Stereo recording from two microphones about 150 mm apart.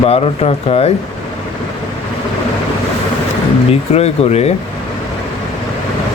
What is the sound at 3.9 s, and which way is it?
Speech, 45° left (ahead or behind).